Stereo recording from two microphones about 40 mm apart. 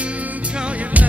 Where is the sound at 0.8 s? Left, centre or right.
Right.